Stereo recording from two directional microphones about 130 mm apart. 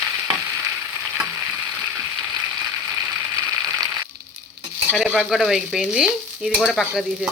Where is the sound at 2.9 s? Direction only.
20° right (ahead or behind).